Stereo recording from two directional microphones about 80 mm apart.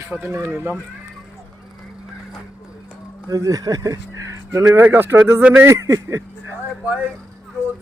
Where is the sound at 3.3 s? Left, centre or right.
Right.